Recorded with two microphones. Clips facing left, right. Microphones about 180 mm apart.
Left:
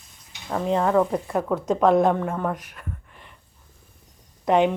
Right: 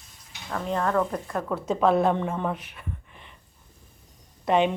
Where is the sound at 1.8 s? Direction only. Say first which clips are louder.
Left 3 dB; 15° left (ahead or behind).